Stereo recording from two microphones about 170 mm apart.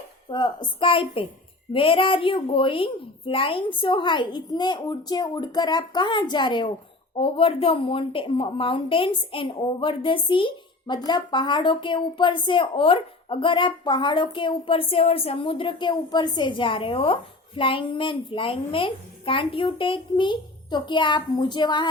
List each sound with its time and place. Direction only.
0.3 s a woman's voice: 25° left (ahead or behind)